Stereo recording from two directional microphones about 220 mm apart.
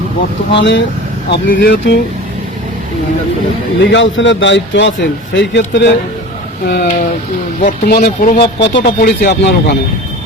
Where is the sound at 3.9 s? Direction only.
60° left (ahead or behind).